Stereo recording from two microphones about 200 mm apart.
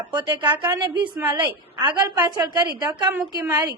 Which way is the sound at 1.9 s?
20° right (ahead or behind).